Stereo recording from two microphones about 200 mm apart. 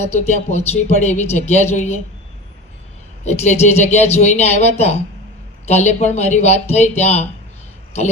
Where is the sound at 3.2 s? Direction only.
35° left (ahead or behind).